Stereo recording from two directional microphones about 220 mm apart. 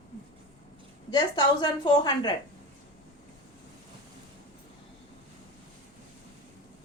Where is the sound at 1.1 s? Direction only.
20° left (ahead or behind).